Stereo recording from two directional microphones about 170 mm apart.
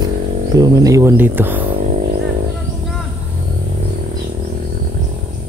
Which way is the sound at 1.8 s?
45° right (ahead or behind).